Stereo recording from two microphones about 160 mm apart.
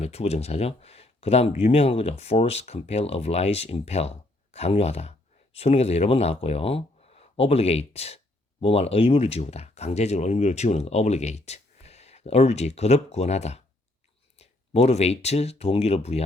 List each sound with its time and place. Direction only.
0.0 s speech: 40° left (ahead or behind)